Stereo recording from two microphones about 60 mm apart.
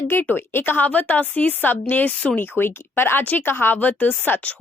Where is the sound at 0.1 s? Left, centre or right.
Left.